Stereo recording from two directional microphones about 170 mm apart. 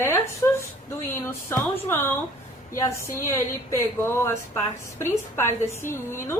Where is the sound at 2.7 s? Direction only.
20° left (ahead or behind).